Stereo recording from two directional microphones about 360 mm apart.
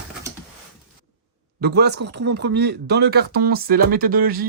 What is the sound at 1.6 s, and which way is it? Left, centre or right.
Speech, right.